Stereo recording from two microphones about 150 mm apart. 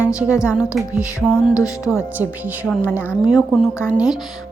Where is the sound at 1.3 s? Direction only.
20° left (ahead or behind).